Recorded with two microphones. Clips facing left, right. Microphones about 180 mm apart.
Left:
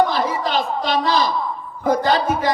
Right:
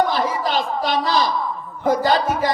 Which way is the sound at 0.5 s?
45° right (ahead or behind).